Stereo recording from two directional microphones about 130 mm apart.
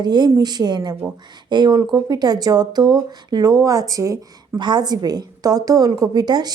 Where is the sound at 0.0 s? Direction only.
35° right (ahead or behind).